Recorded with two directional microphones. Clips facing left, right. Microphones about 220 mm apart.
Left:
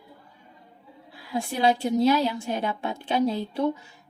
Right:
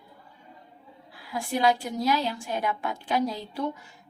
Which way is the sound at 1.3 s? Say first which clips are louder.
Left 1 dB; 25° left (ahead or behind).